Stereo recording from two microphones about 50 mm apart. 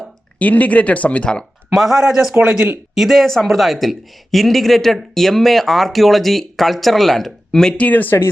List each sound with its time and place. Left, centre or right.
0.3 s speech: left
1.7 s speech: centre
2.4 s speech: right
2.9 s speech: centre
7.8 s speech: left